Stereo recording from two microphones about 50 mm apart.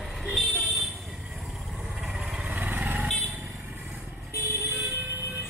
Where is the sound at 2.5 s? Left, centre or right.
Right.